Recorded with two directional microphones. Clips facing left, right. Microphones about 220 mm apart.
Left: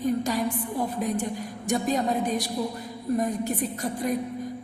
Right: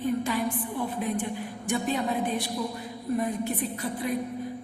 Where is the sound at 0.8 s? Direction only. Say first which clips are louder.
Left 3 dB; 40° left (ahead or behind).